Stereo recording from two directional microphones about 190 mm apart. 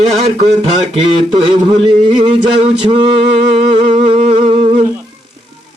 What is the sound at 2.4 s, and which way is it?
Speech, 35° right (ahead or behind).